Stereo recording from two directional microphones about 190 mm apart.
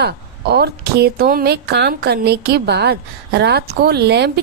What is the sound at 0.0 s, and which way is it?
A woman's voice, 55° right (ahead or behind).